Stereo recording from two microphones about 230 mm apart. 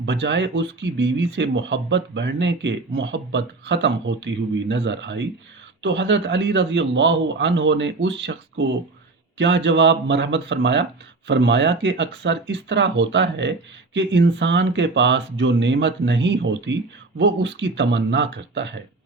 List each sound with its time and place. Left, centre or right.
0.0 s speech: right